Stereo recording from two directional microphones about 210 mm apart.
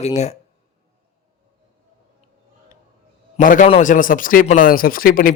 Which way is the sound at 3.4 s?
40° left (ahead or behind).